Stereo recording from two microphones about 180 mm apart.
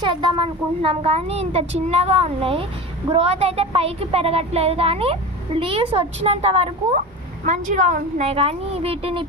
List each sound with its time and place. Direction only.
0.0 s speech: 25° right (ahead or behind)